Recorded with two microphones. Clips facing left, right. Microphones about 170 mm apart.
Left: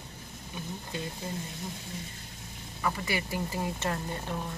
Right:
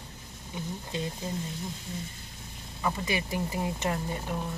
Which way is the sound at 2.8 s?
20° right (ahead or behind).